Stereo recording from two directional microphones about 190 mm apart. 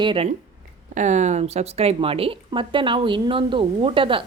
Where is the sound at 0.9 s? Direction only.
40° right (ahead or behind).